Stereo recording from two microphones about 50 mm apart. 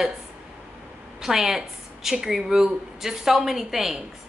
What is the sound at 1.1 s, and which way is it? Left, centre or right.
A woman's voice, centre.